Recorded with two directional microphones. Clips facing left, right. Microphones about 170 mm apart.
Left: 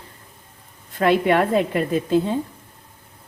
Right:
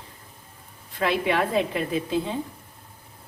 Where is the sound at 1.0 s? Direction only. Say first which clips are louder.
Left 6 dB; 50° left (ahead or behind).